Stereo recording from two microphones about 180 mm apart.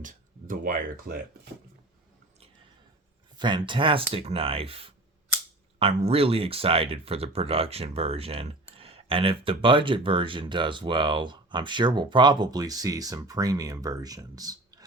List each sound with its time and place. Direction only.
0.0 s speech: 50° right (ahead or behind)
3.3 s speech: 25° right (ahead or behind)